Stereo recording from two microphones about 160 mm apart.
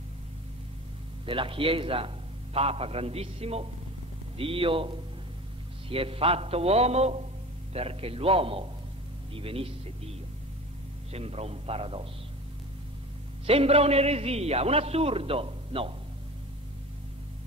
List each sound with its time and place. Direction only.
1.2 s a man's voice: 35° right (ahead or behind)
13.5 s a man's voice: 40° right (ahead or behind)